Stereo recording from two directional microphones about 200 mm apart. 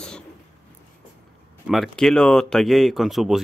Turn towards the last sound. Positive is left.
turn(degrees=0)  # may be behind; listen again after turning